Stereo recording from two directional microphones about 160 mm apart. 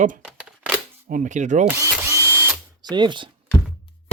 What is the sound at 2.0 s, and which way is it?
Drill, 15° right (ahead or behind).